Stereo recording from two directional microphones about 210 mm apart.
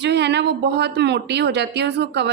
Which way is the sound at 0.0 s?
55° right (ahead or behind).